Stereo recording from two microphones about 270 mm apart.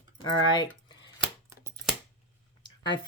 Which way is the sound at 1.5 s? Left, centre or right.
Centre.